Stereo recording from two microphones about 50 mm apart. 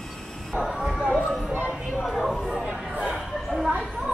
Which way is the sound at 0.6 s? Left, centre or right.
Centre.